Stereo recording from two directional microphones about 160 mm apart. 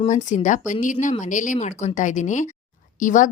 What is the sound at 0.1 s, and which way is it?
A woman's voice, 50° left (ahead or behind).